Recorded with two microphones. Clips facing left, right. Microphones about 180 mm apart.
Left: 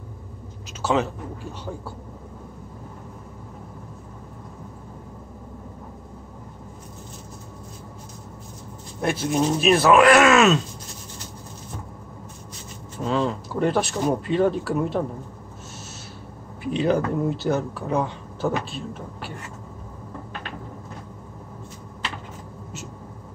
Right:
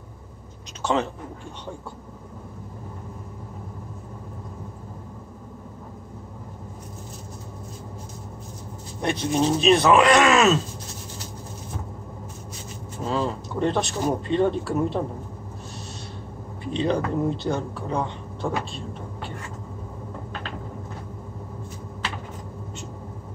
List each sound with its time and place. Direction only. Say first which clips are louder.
0.8 s speech: left 1 dB; 5° left (ahead or behind)
9.0 s speech: even; 5° left (ahead or behind)
13.0 s speech: left 2 dB; 5° right (ahead or behind)
16.7 s speech: left 2 dB; 5° left (ahead or behind)